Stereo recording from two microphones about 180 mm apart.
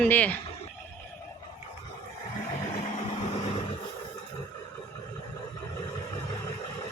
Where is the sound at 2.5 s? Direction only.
35° left (ahead or behind).